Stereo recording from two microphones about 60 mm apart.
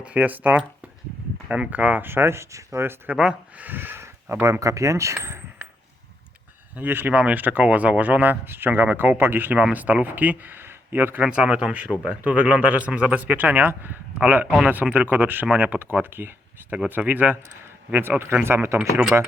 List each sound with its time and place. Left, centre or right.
0.0 s speech: right
2.0 s speech: right
3.1 s speech: right
3.6 s speech: right
4.6 s speech: right
6.7 s speech: right
11.2 s speech: centre; by 18.8 s right